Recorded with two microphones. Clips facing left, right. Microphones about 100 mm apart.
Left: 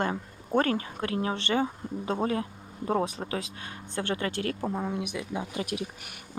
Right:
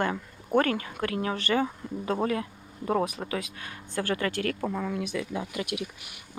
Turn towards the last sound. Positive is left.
turn(degrees=35)  # may be behind; listen again after turning